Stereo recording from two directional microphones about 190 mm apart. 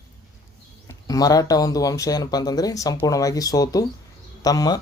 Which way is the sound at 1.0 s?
20° left (ahead or behind).